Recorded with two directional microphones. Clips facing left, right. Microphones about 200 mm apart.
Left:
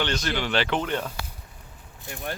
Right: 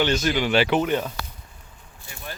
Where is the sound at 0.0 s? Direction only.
10° right (ahead or behind).